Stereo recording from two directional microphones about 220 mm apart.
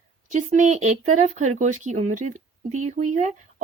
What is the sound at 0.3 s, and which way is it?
A woman's voice, 35° right (ahead or behind).